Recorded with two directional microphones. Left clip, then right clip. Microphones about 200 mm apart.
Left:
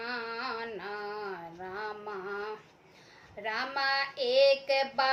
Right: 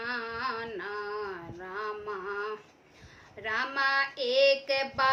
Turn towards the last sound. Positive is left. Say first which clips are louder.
# even
turn(degrees=-15)  # may be behind; listen again after turning